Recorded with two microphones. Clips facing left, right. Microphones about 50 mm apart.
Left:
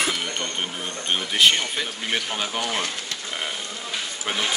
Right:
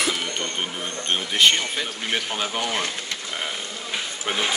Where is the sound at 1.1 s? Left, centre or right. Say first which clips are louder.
Even; centre.